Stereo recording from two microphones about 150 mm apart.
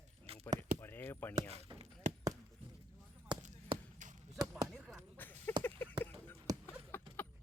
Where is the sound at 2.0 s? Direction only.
60° right (ahead or behind).